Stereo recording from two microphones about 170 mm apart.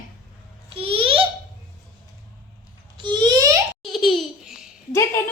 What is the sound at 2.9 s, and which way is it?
Speech, 25° right (ahead or behind).